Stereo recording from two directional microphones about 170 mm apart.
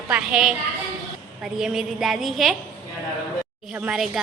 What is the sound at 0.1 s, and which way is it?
A woman's voice, 5° right (ahead or behind).